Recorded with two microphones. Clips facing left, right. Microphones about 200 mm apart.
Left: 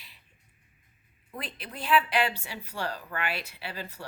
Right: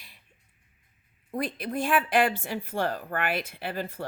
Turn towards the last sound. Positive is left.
turn(degrees=-50)  # may be behind; listen again after turning